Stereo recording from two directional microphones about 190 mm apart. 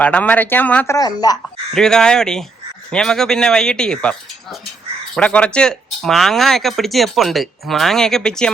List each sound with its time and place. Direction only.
0.0 s speech: 5° left (ahead or behind)
0.9 s speech: 20° left (ahead or behind)
1.7 s speech: 5° left (ahead or behind)